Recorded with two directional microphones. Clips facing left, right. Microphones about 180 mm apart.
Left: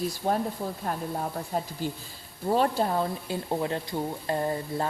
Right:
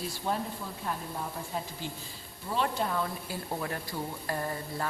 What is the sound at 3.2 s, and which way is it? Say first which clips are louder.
Speech: left 6 dB; 25° left (ahead or behind).